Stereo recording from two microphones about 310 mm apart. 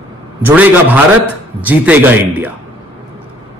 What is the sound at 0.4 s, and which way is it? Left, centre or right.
A man's voice, centre.